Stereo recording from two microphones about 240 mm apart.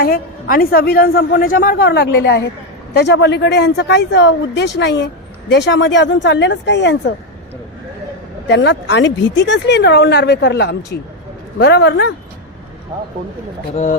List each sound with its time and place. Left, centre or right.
0.0 s a woman's voice: left
8.4 s speech: left
13.7 s a woman's voice: left